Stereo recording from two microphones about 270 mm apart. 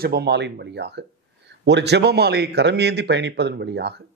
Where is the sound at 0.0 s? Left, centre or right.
Right.